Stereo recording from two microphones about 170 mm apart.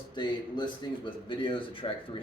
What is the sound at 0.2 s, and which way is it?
Speech, 25° left (ahead or behind).